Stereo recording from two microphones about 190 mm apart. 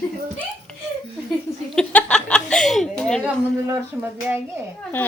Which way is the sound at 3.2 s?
10° right (ahead or behind).